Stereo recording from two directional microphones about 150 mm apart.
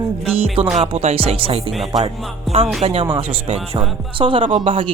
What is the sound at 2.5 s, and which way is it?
Music, centre (ahead or behind).